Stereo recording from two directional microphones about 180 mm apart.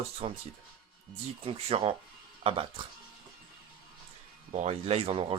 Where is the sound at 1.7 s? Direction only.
30° right (ahead or behind).